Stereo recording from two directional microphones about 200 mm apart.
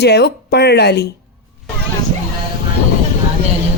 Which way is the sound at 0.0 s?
55° left (ahead or behind).